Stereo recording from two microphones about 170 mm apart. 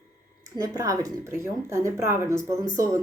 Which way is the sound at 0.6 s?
20° right (ahead or behind).